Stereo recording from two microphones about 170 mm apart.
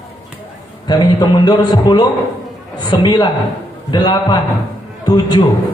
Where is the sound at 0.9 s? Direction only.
25° left (ahead or behind).